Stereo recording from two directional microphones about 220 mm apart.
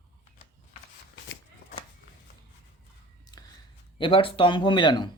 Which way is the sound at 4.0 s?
25° left (ahead or behind).